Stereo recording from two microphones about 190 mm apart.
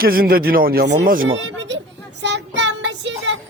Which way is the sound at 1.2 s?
75° right (ahead or behind).